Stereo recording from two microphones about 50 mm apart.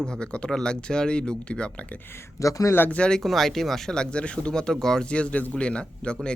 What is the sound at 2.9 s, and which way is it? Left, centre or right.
Speech, centre.